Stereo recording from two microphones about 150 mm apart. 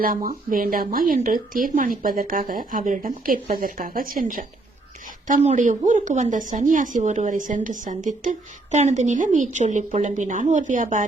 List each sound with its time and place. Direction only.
0.0 s speech: 70° right (ahead or behind)
5.3 s speech: 50° right (ahead or behind)